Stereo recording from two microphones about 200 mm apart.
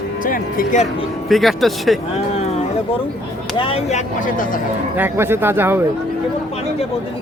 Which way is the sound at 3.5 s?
30° left (ahead or behind).